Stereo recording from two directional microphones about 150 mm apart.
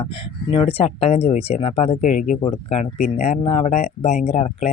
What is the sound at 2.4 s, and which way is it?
Speech, 45° left (ahead or behind).